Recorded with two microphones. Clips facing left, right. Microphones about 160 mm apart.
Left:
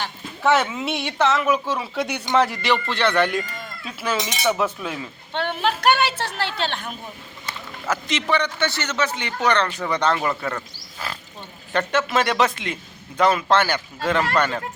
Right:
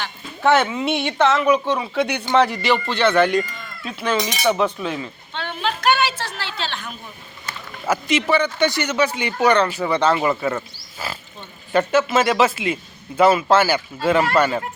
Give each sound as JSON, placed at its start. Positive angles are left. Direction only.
{"t": 0.4, "sound": "speech", "side_deg": 0}
{"t": 5.3, "sound": "a woman's voice", "side_deg": 60}
{"t": 7.9, "sound": "speech", "side_deg": -10}